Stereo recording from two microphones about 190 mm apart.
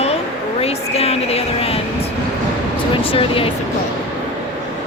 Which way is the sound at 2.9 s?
30° left (ahead or behind).